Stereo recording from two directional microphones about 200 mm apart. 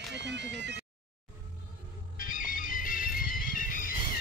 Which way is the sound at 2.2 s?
45° left (ahead or behind).